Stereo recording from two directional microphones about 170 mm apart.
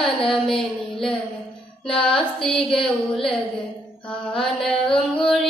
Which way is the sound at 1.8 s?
5° left (ahead or behind).